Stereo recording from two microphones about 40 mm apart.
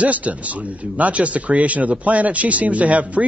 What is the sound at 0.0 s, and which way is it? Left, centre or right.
Speech, right.